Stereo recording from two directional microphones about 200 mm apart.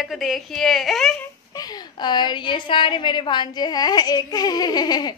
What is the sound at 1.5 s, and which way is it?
A woman's voice, 20° left (ahead or behind).